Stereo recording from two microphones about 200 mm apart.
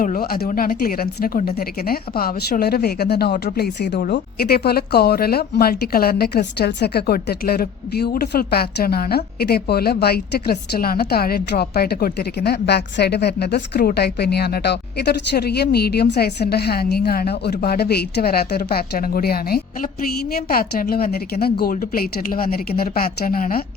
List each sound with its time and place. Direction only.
0.0 s speech: 45° left (ahead or behind)